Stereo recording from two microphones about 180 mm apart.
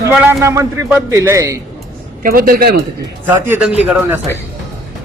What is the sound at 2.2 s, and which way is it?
Speech, 55° right (ahead or behind).